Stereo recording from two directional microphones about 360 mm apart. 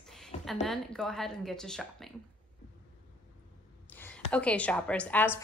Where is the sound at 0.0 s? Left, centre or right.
Centre.